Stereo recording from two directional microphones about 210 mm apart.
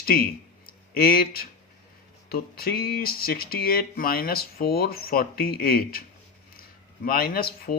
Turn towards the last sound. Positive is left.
turn(degrees=45)  # may be behind; listen again after turning